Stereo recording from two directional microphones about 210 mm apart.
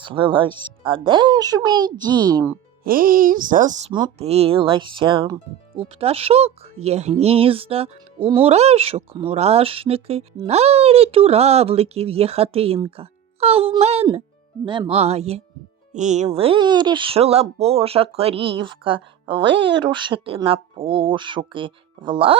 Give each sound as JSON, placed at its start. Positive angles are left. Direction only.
{"t": 0.0, "sound": "speech", "side_deg": -25}
{"t": 2.8, "sound": "speech", "side_deg": -45}
{"t": 3.9, "sound": "speech", "side_deg": -25}